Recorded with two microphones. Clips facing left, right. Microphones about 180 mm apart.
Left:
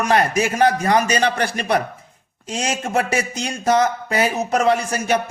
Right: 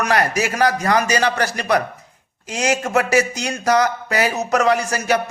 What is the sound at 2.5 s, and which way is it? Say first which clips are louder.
Speech: right 3 dB; 30° left (ahead or behind).